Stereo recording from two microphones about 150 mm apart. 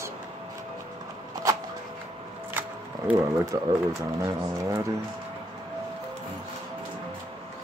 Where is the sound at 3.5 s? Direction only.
30° right (ahead or behind).